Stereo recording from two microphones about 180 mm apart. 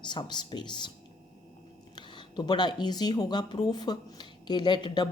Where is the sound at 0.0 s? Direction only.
25° left (ahead or behind).